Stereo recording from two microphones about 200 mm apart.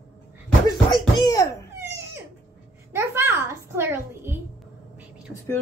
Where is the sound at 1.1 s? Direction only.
20° left (ahead or behind).